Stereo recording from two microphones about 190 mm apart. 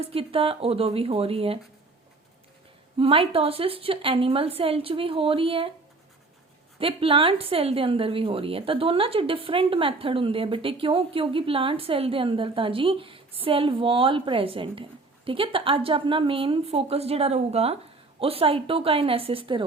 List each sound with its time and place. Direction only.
0.0 s speech: 30° right (ahead or behind)
3.0 s a woman's voice: 30° right (ahead or behind)
6.7 s a woman's voice: 30° right (ahead or behind)